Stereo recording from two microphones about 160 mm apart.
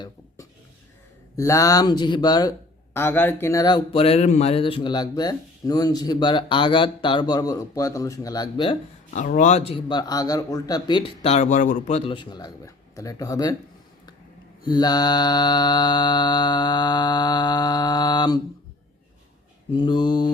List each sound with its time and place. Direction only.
1.4 s speech: 20° left (ahead or behind)
3.9 s speech: 40° left (ahead or behind)
9.1 s speech: 55° left (ahead or behind); by 11.3 s 25° left (ahead or behind)
11.3 s speech: 50° left (ahead or behind); by 13.6 s 20° left (ahead or behind)
14.6 s speech: 25° left (ahead or behind)
19.7 s speech: 30° left (ahead or behind)